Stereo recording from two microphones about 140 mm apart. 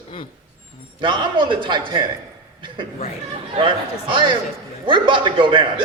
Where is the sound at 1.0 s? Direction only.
35° right (ahead or behind).